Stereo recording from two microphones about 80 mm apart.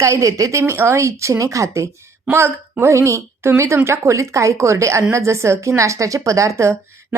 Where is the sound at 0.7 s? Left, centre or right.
Right.